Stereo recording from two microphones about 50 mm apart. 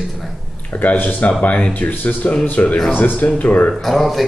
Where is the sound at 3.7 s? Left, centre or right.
Centre.